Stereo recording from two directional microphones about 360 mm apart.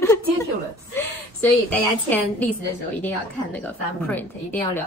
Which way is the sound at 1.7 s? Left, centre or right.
Centre.